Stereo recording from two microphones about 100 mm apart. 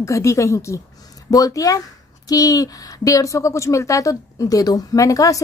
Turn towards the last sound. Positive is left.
turn(degrees=35)  # may be behind; listen again after turning